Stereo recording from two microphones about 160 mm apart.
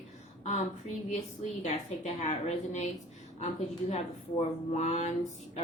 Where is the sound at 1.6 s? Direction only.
45° left (ahead or behind).